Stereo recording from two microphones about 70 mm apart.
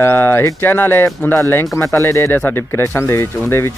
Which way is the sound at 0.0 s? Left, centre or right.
Left.